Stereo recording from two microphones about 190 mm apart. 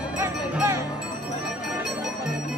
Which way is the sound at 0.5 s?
15° right (ahead or behind).